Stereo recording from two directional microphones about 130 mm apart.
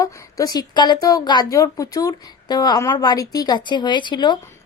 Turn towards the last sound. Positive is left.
turn(degrees=35)  # may be behind; listen again after turning